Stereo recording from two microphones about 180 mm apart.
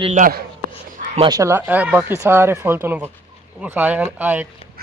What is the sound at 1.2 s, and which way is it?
Speech, 20° right (ahead or behind).